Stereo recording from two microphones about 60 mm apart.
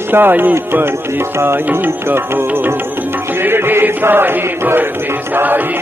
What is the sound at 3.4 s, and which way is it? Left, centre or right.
Chant, right.